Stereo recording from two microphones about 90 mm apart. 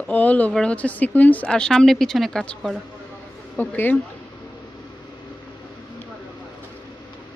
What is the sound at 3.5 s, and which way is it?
Speech, 20° left (ahead or behind).